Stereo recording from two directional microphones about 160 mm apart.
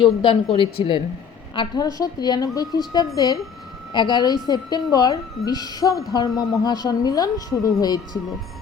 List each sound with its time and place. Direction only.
0.0 s a woman's voice: 30° left (ahead or behind)